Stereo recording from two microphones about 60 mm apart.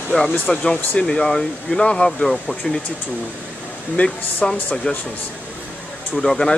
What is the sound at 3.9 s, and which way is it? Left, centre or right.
Speech, centre.